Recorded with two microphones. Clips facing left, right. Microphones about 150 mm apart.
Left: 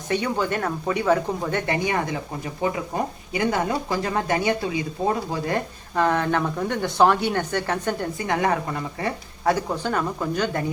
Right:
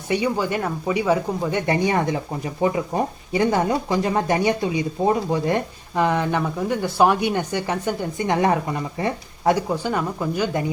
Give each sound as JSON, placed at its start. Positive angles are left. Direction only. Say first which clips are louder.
{"t": 0.1, "sound": "speech", "louder": "right 2 dB", "side_deg": -10}
{"t": 8.2, "sound": "speech", "louder": "right 4 dB", "side_deg": -25}